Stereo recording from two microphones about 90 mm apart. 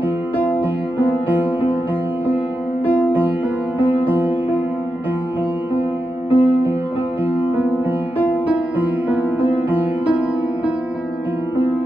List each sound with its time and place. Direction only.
0.9 s music: 20° right (ahead or behind)
3.8 s music: 20° right (ahead or behind)
6.3 s music: 20° right (ahead or behind)
8.5 s music: 20° right (ahead or behind)